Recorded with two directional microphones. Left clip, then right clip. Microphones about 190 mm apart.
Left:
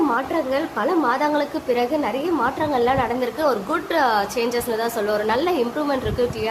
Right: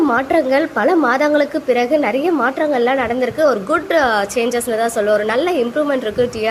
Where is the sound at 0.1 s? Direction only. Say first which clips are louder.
Right 7 dB; 25° right (ahead or behind).